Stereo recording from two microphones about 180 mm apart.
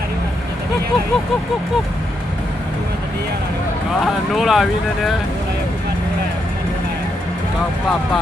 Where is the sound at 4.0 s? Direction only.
Centre (ahead or behind).